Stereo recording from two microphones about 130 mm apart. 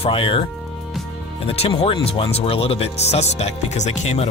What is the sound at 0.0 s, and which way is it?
Speech, 45° left (ahead or behind).